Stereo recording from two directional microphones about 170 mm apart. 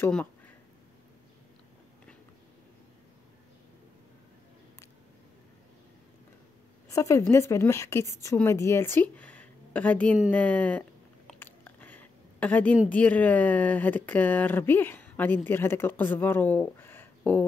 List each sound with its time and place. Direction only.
0.0 s speech: 10° left (ahead or behind)
6.9 s a woman's voice: 20° left (ahead or behind)
10.3 s chewing: 10° left (ahead or behind)
12.9 s speech: 10° left (ahead or behind)